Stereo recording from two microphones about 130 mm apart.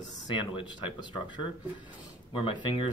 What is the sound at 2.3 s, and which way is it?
Speech, 40° left (ahead or behind).